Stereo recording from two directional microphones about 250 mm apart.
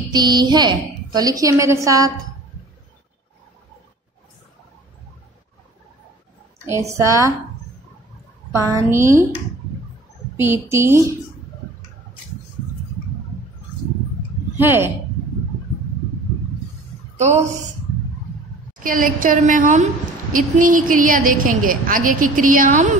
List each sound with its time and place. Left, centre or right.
0.1 s a woman's voice: centre
6.6 s a woman's voice: centre
8.6 s a woman's voice: centre
10.3 s a woman's voice: centre
14.6 s a woman's voice: centre
18.8 s a woman's voice: right